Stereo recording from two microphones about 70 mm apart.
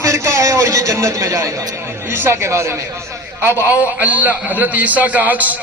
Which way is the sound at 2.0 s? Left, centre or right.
Right.